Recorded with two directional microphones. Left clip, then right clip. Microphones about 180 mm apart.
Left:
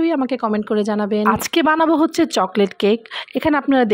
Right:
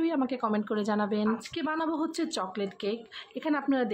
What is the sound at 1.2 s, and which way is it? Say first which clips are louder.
A woman's voice: left 16 dB; 60° left (ahead or behind).